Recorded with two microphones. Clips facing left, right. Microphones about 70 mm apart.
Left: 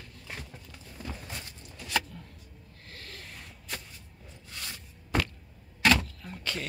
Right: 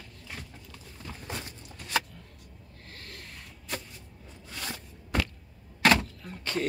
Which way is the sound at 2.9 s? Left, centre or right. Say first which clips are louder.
Even; right.